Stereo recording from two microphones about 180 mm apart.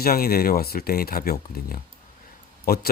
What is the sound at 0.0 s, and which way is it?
Speech, 55° left (ahead or behind).